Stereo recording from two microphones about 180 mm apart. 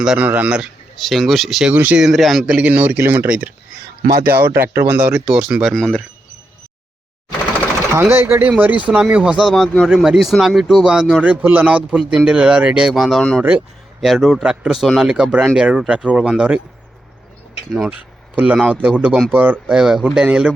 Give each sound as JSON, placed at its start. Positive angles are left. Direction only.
{"t": 0.0, "sound": "speech", "side_deg": -5}
{"t": 4.1, "sound": "speech", "side_deg": -60}
{"t": 4.4, "sound": "speech", "side_deg": -10}
{"t": 7.9, "sound": "speech", "side_deg": -15}
{"t": 17.7, "sound": "speech", "side_deg": -5}